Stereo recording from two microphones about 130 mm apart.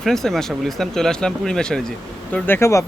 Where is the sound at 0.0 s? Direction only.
5° left (ahead or behind).